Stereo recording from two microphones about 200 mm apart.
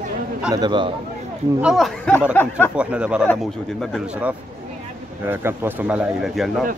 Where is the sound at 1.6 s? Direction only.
Centre (ahead or behind).